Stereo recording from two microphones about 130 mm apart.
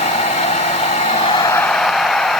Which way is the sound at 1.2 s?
35° left (ahead or behind).